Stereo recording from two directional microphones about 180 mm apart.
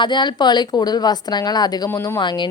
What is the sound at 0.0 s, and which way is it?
A woman's voice, 25° left (ahead or behind).